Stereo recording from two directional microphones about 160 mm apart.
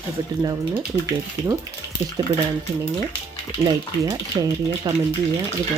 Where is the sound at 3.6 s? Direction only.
25° right (ahead or behind).